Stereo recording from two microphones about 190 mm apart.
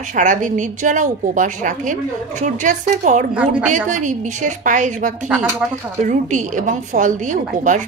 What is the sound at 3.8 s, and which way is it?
A woman's voice, 40° right (ahead or behind).